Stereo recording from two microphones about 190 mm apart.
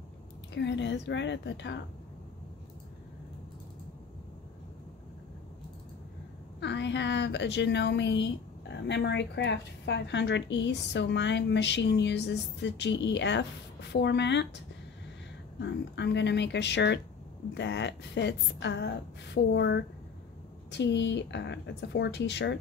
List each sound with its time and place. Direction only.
0.6 s a woman's voice: 70° left (ahead or behind)
6.6 s a woman's voice: 70° left (ahead or behind)
15.6 s a woman's voice: 65° left (ahead or behind)